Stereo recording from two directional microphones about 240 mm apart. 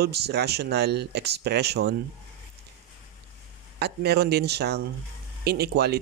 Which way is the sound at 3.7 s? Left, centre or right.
Right.